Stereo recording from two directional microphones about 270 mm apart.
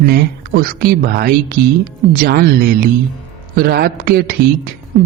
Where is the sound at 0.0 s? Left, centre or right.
Right.